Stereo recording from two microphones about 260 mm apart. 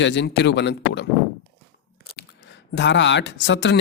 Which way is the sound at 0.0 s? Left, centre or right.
Left.